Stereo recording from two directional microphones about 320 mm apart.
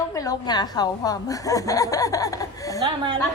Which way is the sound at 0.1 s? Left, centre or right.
Centre.